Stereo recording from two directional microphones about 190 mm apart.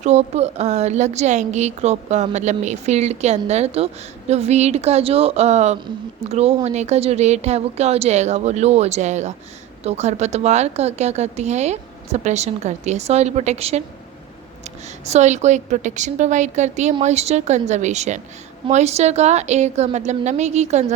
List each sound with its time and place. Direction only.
0.0 s a woman's voice: 35° right (ahead or behind)